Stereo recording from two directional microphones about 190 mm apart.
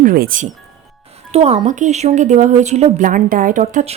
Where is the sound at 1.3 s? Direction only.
35° right (ahead or behind).